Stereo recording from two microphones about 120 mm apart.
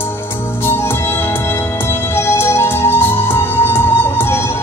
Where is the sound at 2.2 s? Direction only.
20° left (ahead or behind).